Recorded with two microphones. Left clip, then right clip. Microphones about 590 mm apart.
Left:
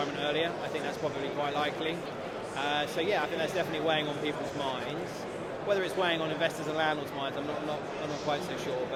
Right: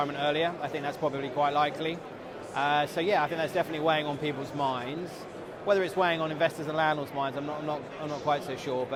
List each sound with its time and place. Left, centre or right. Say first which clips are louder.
0.2 s speech: right 2 dB; right
8.3 s speech: right 5 dB; right